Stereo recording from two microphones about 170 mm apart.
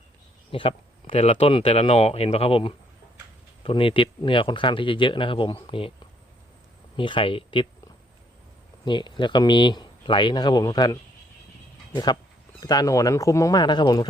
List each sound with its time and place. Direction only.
0.5 s speech: 30° left (ahead or behind)
6.9 s speech: 30° left (ahead or behind)
8.8 s speech: 30° left (ahead or behind)
12.5 s speech: 25° left (ahead or behind)